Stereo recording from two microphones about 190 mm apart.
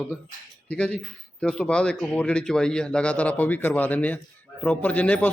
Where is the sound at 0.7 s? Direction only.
5° left (ahead or behind).